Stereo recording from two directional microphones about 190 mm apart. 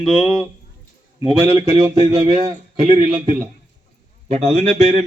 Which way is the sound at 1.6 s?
15° right (ahead or behind).